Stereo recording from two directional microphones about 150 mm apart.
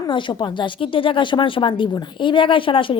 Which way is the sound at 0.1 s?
30° left (ahead or behind).